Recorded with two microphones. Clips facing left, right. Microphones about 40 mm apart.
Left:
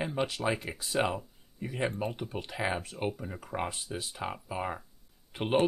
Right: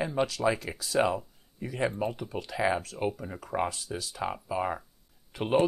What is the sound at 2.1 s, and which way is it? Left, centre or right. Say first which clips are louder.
Speech: right 1 dB; left.